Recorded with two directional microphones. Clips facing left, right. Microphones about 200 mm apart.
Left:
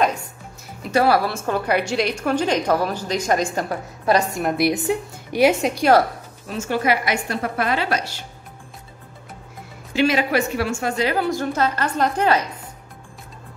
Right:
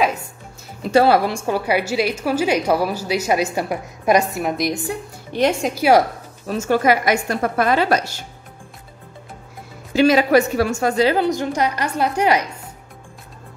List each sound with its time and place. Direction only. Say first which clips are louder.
0.9 s a woman's voice: right 3 dB; 25° right (ahead or behind); by 4.6 s 5° right (ahead or behind)
4.7 s speech: left 4 dB; 20° left (ahead or behind)
5.4 s a woman's voice: left 1 dB; 5° left (ahead or behind)
6.4 s a woman's voice: right 5 dB; 45° right (ahead or behind)
9.9 s speech: right 5 dB; 40° right (ahead or behind)
11.2 s a woman's voice: right 2 dB; 15° right (ahead or behind)